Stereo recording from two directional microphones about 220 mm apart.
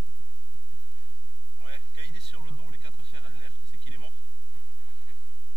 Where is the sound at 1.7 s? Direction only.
20° right (ahead or behind).